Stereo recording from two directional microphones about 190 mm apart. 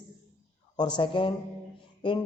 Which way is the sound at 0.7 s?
25° left (ahead or behind).